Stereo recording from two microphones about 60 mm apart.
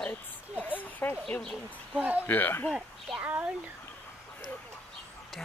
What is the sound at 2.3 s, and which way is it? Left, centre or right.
Speech, left.